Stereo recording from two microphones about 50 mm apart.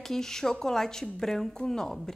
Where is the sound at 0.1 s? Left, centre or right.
Centre.